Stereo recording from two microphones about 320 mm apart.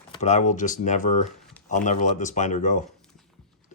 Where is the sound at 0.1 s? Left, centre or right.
Left.